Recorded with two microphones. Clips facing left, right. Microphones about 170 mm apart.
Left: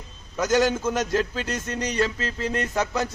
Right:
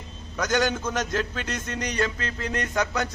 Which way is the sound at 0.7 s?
5° left (ahead or behind).